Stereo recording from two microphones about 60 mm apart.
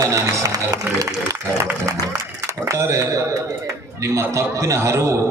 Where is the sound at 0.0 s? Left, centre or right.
Right.